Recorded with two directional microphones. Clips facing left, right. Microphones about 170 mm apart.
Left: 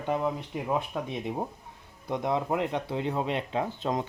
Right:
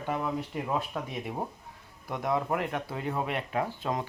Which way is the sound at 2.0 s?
20° left (ahead or behind).